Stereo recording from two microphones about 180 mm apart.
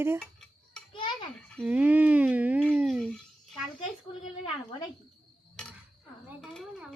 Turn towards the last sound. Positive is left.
turn(degrees=-5)  # may be behind; listen again after turning